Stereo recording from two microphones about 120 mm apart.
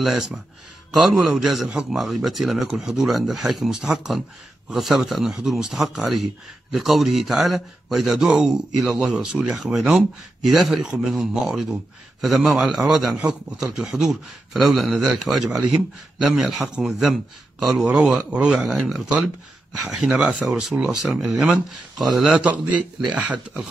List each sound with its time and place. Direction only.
0.0 s a man's voice: centre (ahead or behind)